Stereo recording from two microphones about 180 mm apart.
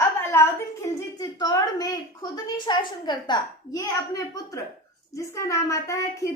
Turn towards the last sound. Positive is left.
turn(degrees=15)  # may be behind; listen again after turning